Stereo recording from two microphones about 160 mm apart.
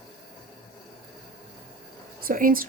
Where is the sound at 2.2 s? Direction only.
60° right (ahead or behind).